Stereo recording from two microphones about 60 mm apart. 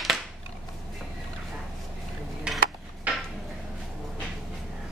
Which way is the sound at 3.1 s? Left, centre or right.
Right.